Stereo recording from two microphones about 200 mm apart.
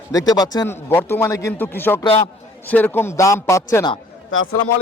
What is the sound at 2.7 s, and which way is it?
Speech, 10° left (ahead or behind).